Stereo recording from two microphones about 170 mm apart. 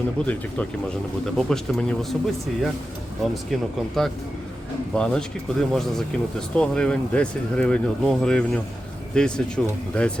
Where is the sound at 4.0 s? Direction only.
Centre (ahead or behind).